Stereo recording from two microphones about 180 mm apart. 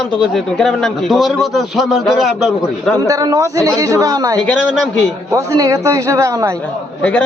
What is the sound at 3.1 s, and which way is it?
A woman's voice, 20° right (ahead or behind).